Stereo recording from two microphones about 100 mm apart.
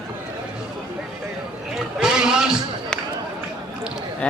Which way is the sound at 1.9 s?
5° right (ahead or behind).